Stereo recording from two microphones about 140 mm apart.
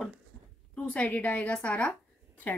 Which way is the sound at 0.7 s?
10° left (ahead or behind).